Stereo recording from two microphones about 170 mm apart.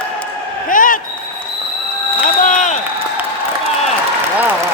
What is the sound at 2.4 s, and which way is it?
Speech, 45° left (ahead or behind).